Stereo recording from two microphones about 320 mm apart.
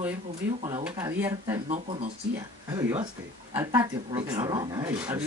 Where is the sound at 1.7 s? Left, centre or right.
Right.